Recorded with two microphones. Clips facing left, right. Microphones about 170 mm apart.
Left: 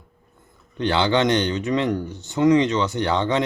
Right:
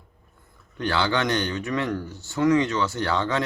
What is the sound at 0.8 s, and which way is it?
Speech, 20° left (ahead or behind).